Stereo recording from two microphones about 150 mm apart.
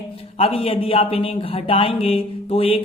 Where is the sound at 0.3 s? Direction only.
40° left (ahead or behind).